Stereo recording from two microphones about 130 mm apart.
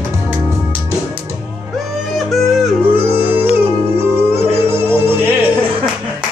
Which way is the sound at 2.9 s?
15° right (ahead or behind).